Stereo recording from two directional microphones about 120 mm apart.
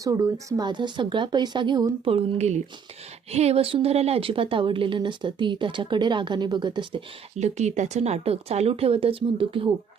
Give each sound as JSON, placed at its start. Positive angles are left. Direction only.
{"t": 0.0, "sound": "speech", "side_deg": -25}
{"t": 2.0, "sound": "a woman's voice", "side_deg": -60}
{"t": 7.3, "sound": "speech", "side_deg": -70}